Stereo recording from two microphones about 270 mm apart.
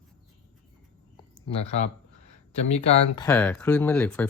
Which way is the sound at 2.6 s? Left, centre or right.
Left.